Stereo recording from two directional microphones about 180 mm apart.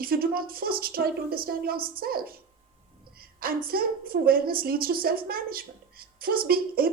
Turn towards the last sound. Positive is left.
turn(degrees=-55)  # may be behind; listen again after turning